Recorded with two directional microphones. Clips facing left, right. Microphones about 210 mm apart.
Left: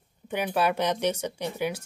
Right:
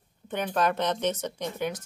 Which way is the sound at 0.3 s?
10° left (ahead or behind).